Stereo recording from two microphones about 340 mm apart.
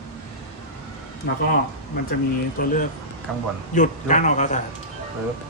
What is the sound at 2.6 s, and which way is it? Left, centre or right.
Speech, left.